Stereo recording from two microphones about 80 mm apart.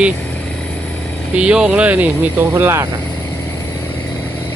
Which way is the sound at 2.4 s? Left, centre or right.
Right.